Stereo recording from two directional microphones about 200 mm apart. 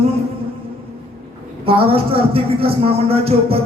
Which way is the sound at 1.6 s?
30° right (ahead or behind).